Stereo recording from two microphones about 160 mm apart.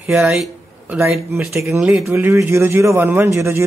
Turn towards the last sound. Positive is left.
turn(degrees=-15)  # may be behind; listen again after turning